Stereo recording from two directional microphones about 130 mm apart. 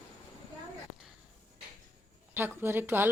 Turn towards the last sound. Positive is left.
turn(degrees=-15)  # may be behind; listen again after turning